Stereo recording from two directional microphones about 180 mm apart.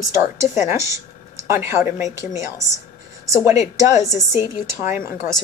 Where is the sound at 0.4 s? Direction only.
15° right (ahead or behind).